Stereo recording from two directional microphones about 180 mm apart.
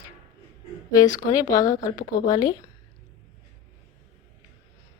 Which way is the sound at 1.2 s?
20° left (ahead or behind).